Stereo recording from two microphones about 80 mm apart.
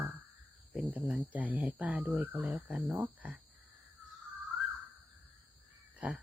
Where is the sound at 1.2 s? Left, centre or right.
Centre.